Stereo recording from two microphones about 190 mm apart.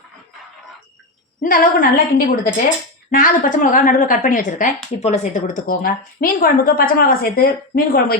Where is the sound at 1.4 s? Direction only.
45° left (ahead or behind).